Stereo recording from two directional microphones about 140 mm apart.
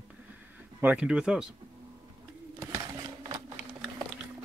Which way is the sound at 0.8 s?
5° right (ahead or behind).